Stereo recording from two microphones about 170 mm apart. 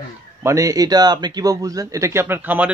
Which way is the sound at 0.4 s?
15° right (ahead or behind).